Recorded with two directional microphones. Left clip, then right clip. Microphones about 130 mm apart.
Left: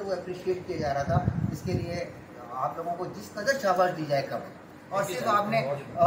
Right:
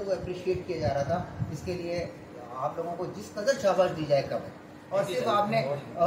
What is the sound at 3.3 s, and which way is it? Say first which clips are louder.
Speech: even; 25° right (ahead or behind).